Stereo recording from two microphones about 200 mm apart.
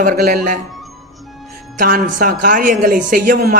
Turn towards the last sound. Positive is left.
turn(degrees=-40)  # may be behind; listen again after turning